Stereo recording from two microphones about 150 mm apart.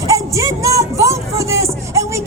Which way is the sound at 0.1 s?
20° right (ahead or behind).